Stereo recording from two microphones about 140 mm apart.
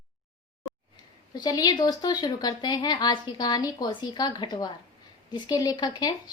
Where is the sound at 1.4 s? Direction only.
30° left (ahead or behind).